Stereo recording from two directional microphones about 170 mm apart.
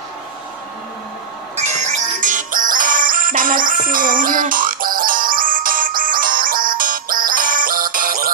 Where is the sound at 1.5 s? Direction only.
40° right (ahead or behind).